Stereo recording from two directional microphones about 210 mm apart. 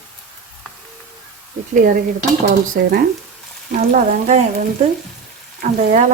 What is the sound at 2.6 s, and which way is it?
Speech, 45° right (ahead or behind).